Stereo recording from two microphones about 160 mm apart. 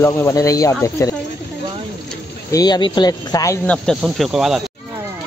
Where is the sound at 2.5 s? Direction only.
25° left (ahead or behind).